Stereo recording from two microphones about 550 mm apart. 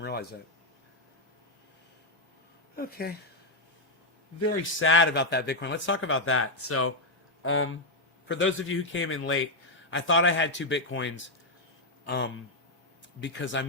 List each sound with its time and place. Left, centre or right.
0.0 s a sound: centre
2.7 s speech: centre
4.4 s speech: left